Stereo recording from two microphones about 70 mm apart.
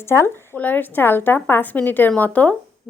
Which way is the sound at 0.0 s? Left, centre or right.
Left.